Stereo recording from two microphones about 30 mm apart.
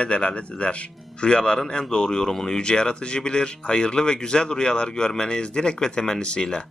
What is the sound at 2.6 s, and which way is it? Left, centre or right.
Speech, left.